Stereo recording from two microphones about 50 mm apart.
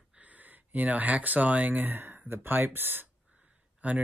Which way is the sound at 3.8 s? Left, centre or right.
Right.